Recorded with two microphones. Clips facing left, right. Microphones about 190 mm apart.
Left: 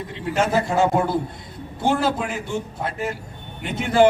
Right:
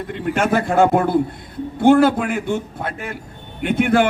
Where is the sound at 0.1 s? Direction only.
55° right (ahead or behind).